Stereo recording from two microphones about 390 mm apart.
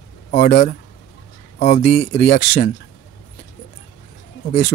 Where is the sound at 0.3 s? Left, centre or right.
Left.